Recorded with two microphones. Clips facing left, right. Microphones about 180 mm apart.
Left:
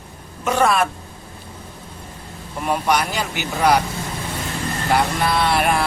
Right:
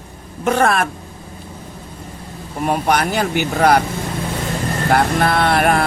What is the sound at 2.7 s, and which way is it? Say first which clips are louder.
Vehicle: right 2 dB; 50° right (ahead or behind).